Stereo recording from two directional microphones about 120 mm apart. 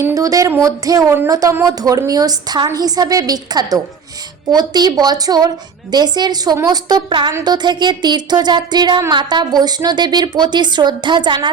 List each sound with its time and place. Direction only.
0.0 s a woman's voice: 30° right (ahead or behind)